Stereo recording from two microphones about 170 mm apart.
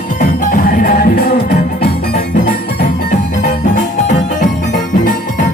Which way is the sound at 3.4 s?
45° left (ahead or behind).